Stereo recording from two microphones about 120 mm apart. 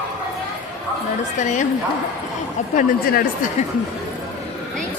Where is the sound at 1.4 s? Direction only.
90° left.